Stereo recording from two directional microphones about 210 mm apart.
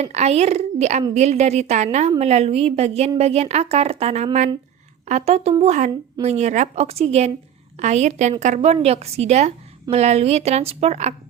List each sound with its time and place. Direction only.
0.0 s a woman's voice: 30° right (ahead or behind)